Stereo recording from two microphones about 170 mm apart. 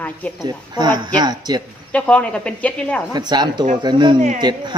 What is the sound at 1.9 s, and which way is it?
Speech, 5° left (ahead or behind).